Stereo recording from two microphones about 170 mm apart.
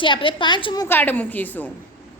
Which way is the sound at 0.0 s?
30° left (ahead or behind).